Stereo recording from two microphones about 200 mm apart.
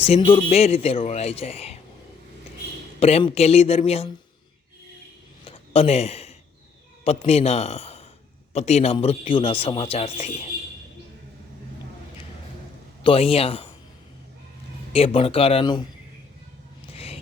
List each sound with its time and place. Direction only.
0.0 s speech: 30° left (ahead or behind)
3.0 s speech: 30° left (ahead or behind)
5.5 s a sound: 30° left (ahead or behind)
7.0 s a man's voice: 30° left (ahead or behind)
13.0 s speech: 25° left (ahead or behind)
14.9 s speech: 30° left (ahead or behind)
16.9 s a sound: 30° left (ahead or behind)